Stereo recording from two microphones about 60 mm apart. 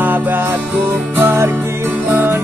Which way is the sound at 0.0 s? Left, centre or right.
Right.